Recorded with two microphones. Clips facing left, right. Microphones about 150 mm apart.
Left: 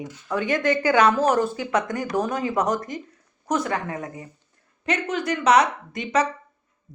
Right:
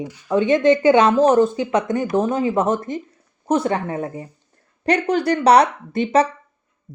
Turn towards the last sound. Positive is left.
turn(degrees=-30)  # may be behind; listen again after turning